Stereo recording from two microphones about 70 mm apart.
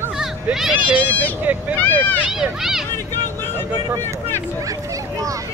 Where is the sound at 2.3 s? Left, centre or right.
Centre.